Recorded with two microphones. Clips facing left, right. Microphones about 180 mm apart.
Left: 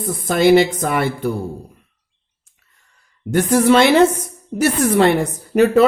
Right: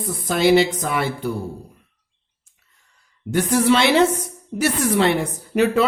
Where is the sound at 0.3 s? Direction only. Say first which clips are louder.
Left 3 dB; 50° left (ahead or behind).